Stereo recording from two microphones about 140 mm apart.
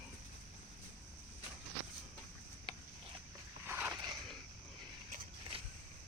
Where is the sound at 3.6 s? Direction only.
15° right (ahead or behind).